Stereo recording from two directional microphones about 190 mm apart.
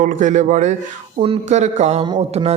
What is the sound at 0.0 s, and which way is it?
A man's voice, 40° right (ahead or behind).